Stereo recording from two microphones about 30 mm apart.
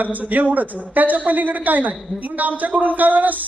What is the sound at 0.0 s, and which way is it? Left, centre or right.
A man's voice, right.